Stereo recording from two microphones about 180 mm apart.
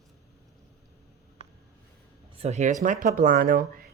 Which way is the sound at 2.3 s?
40° right (ahead or behind).